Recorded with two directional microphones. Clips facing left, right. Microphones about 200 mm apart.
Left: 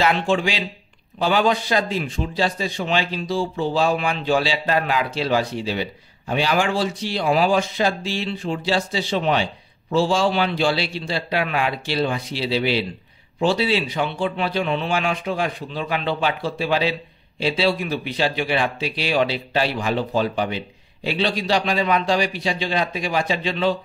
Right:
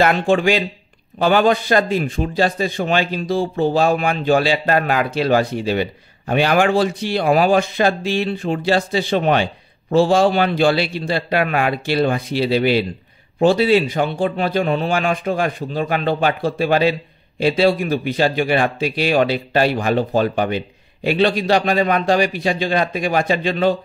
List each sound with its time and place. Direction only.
0.0 s a man's voice: 55° right (ahead or behind)